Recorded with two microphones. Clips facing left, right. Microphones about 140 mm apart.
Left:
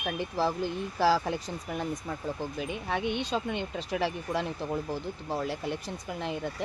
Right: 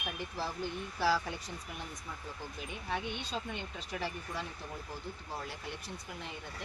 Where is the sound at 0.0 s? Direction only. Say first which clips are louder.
Left 10 dB; 90° left.